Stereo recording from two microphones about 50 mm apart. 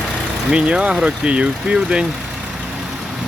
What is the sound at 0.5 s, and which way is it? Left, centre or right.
Speech, right.